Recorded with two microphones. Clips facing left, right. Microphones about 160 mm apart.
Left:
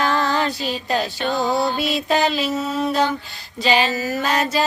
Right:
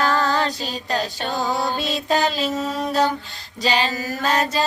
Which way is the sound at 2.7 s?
40° right (ahead or behind).